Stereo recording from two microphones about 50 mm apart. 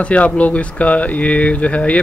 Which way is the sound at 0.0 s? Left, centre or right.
Left.